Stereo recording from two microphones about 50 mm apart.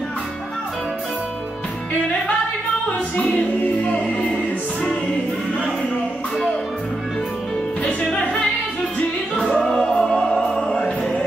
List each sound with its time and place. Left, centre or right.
3.2 s music: left
3.8 s music: left
9.4 s music: centre
9.8 s music: centre